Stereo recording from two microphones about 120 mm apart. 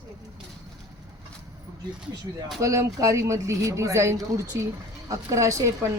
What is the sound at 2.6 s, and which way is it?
A man's voice, 25° right (ahead or behind).